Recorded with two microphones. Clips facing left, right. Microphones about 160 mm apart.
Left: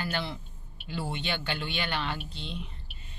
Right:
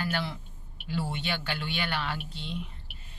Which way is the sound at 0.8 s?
15° left (ahead or behind).